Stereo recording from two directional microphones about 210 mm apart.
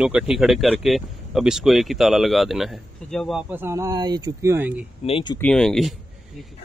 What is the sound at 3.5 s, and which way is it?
Speech, 10° right (ahead or behind).